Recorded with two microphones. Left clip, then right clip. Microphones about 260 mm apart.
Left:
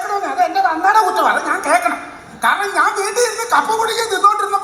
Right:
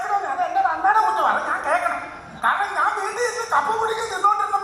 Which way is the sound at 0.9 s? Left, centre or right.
Left.